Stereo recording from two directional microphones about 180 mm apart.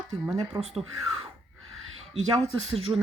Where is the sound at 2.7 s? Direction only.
35° right (ahead or behind).